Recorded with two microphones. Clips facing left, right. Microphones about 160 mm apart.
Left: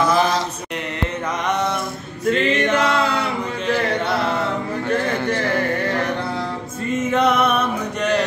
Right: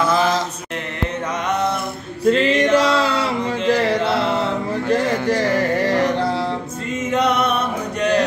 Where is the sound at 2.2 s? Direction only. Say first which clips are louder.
Right 3 dB; 30° right (ahead or behind).